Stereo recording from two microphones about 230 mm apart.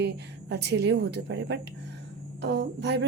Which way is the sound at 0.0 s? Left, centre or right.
Right.